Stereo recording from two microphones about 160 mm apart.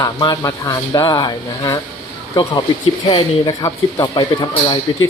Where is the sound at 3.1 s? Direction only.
35° left (ahead or behind).